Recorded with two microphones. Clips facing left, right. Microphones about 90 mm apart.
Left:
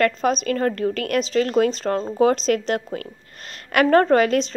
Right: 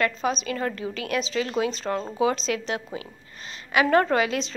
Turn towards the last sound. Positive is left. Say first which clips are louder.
# left 6 dB
turn(degrees=50)  # may be behind; listen again after turning